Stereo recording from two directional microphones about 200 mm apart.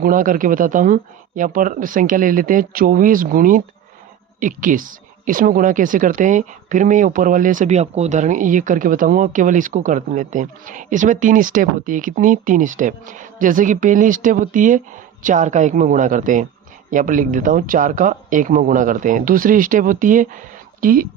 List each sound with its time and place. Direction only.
0.0 s speech: 40° right (ahead or behind)